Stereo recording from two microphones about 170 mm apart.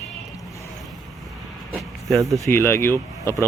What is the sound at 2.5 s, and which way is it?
Speech, 15° left (ahead or behind).